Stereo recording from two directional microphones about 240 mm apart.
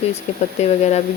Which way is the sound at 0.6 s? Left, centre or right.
Left.